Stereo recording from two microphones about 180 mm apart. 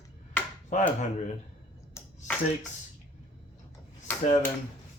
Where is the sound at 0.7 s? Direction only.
45° left (ahead or behind).